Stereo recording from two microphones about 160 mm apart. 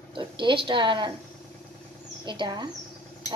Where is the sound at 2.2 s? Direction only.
30° right (ahead or behind).